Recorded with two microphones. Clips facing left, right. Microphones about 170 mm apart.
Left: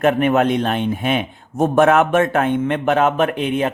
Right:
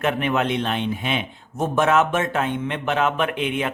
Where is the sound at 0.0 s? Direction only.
45° left (ahead or behind).